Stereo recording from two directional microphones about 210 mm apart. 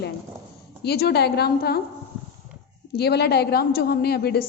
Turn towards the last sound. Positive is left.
turn(degrees=50)  # may be behind; listen again after turning